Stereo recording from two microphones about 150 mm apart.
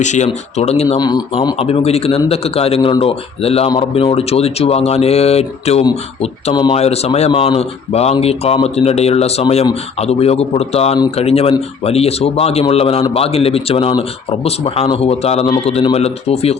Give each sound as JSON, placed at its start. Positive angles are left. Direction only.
{"t": 0.0, "sound": "speech", "side_deg": 50}
{"t": 0.9, "sound": "speech", "side_deg": 25}
{"t": 1.5, "sound": "a man's voice", "side_deg": 40}
{"t": 6.5, "sound": "speech", "side_deg": 30}
{"t": 6.7, "sound": "a man's voice", "side_deg": 45}